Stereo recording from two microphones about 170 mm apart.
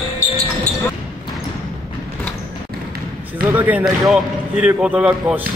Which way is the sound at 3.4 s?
10° right (ahead or behind).